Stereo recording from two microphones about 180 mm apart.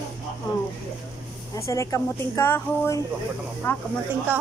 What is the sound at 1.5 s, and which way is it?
Speech, 15° left (ahead or behind).